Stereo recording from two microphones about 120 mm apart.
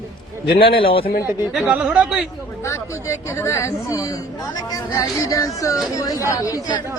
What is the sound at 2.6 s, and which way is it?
Speech, 25° left (ahead or behind).